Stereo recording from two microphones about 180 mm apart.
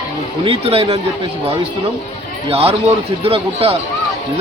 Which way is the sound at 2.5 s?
35° right (ahead or behind).